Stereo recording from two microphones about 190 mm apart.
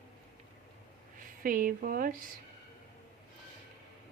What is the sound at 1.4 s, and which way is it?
Speech, 45° right (ahead or behind).